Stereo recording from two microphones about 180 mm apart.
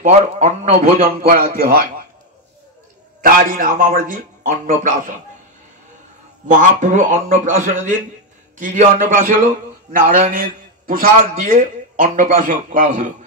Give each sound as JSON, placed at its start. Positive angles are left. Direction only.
{"t": 0.0, "sound": "a man's voice", "side_deg": -40}
{"t": 3.2, "sound": "a man's voice", "side_deg": -50}
{"t": 6.4, "sound": "a man's voice", "side_deg": -45}